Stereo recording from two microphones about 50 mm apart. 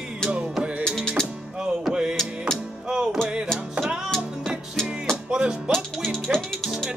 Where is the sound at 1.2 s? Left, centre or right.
Centre.